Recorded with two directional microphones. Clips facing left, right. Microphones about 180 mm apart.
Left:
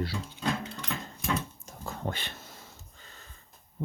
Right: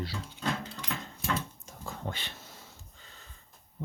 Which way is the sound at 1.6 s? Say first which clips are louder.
Left 3 dB; 45° left (ahead or behind).